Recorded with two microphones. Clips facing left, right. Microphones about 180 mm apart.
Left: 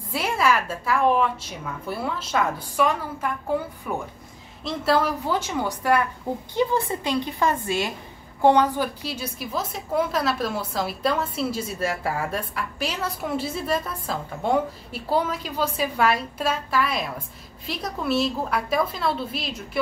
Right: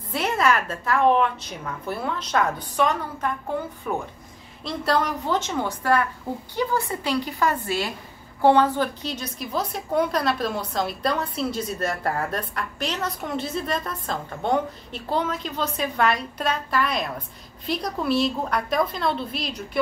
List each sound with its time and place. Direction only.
0.1 s a woman's voice: 5° left (ahead or behind)